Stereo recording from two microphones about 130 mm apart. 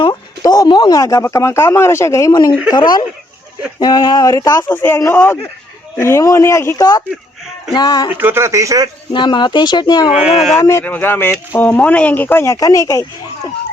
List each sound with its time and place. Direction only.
0.1 s speech: 30° left (ahead or behind)
2.7 s speech: 35° left (ahead or behind)
4.7 s speech: 15° left (ahead or behind); by 8.1 s 30° left (ahead or behind)
8.1 s speech: 15° right (ahead or behind)
9.1 s speech: 35° left (ahead or behind)
10.1 s speech: 5° right (ahead or behind)
10.6 s speech: 20° left (ahead or behind)